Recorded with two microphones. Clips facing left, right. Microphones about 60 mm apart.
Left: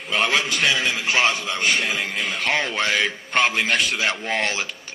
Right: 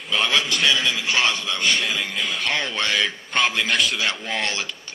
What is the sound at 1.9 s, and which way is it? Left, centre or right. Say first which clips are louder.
Speech: left 1 dB; left.